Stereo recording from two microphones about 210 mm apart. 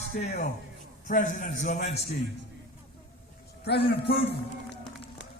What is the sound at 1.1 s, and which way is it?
Speech, 40° left (ahead or behind).